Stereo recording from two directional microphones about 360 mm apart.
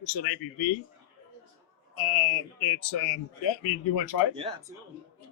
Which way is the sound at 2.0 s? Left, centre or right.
Left.